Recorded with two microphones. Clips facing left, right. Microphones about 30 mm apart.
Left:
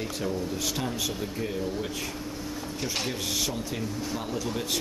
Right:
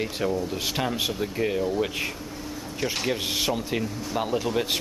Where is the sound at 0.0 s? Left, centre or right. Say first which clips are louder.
Right 4 dB; right.